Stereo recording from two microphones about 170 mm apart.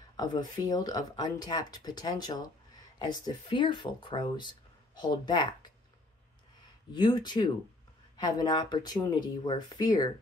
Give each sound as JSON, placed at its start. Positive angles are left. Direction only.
{"t": 0.2, "sound": "speech", "side_deg": 25}
{"t": 6.9, "sound": "speech", "side_deg": 25}